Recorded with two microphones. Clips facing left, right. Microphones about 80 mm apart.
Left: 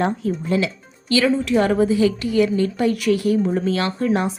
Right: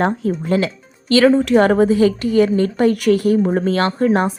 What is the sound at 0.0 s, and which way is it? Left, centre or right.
A woman's voice, right.